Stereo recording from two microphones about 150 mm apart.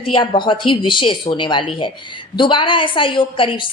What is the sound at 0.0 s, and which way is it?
A woman's voice, 35° left (ahead or behind).